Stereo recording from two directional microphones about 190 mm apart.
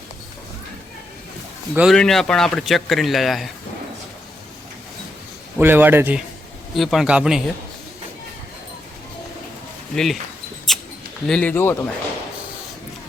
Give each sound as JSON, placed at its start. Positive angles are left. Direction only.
{"t": 1.7, "sound": "speech", "side_deg": 0}
{"t": 5.5, "sound": "speech", "side_deg": -10}
{"t": 9.9, "sound": "speech", "side_deg": 0}
{"t": 10.7, "sound": "mouse", "side_deg": 0}
{"t": 11.3, "sound": "speech", "side_deg": 5}